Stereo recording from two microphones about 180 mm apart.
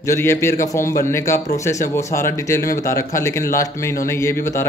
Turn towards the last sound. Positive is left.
turn(degrees=15)  # may be behind; listen again after turning